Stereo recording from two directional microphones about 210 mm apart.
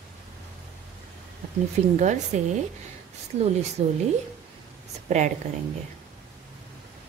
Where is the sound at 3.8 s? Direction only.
30° right (ahead or behind).